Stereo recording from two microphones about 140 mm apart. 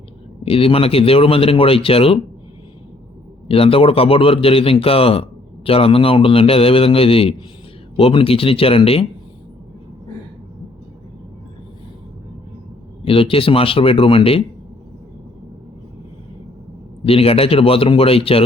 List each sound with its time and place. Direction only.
0.4 s speech: 45° left (ahead or behind)
3.5 s a man's voice: 40° left (ahead or behind)
13.1 s a man's voice: 40° left (ahead or behind)
17.1 s speech: 45° left (ahead or behind)